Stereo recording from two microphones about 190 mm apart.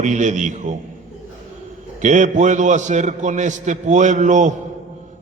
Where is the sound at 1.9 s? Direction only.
40° right (ahead or behind).